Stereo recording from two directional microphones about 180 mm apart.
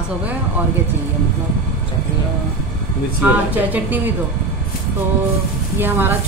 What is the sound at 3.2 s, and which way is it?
Speech, 10° right (ahead or behind).